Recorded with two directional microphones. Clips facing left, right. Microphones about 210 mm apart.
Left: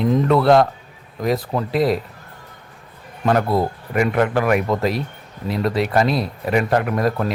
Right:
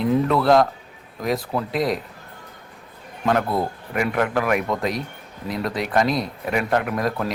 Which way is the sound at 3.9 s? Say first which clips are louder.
Left 4 dB; centre (ahead or behind).